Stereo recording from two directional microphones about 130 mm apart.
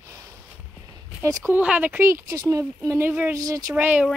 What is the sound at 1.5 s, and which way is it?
Speech, 10° right (ahead or behind).